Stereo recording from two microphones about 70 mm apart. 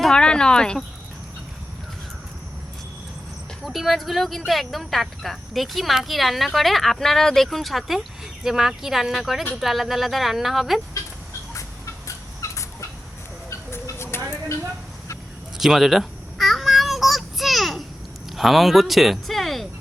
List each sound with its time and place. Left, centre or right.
0.0 s speech: centre
3.7 s speech: centre
12.0 s turkey: left
13.5 s a sound: left
15.5 s babbling: centre
18.3 s speech: centre